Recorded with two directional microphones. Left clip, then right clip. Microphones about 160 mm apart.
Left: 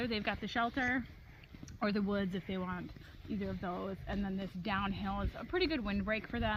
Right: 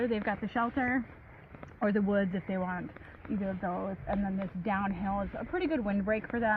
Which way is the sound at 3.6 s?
10° right (ahead or behind).